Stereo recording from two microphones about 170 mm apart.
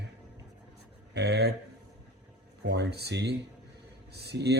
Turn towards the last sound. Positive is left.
turn(degrees=-75)  # may be behind; listen again after turning